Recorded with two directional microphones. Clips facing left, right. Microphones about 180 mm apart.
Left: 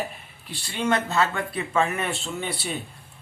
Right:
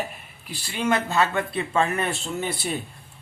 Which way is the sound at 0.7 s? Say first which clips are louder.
Even; 10° right (ahead or behind).